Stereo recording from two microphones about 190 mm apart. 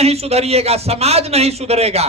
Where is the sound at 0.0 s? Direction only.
35° right (ahead or behind).